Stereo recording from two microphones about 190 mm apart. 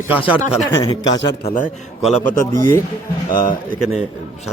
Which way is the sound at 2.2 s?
15° left (ahead or behind).